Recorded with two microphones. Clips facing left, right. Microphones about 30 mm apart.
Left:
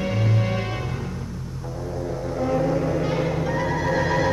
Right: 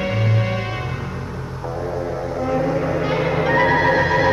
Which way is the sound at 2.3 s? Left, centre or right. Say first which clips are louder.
Right 1 dB; centre.